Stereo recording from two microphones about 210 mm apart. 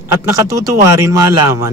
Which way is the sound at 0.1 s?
15° right (ahead or behind).